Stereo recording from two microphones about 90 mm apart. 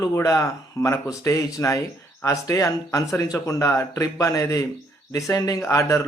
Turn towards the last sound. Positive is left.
turn(degrees=35)  # may be behind; listen again after turning